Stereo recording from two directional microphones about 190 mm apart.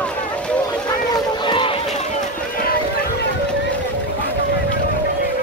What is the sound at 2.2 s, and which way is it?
Run, 50° left (ahead or behind).